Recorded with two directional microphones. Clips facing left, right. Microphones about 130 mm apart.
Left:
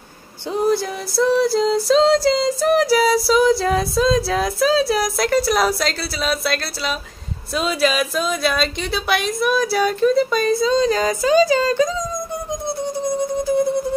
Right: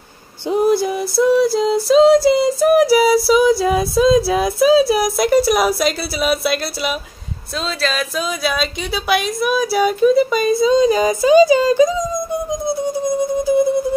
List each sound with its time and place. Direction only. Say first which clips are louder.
0.5 s music: right 4 dB; 10° right (ahead or behind)
7.5 s speech: left 3 dB; 10° left (ahead or behind)
8.2 s speech: right 1 dB; 5° right (ahead or behind)
13.4 s music: right 4 dB; 10° right (ahead or behind)